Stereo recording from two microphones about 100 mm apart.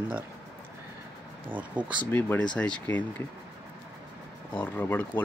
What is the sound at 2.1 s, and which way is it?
Speech, 20° left (ahead or behind).